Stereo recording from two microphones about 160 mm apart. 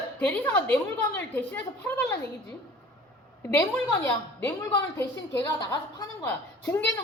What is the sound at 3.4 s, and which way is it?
Speech, 15° left (ahead or behind).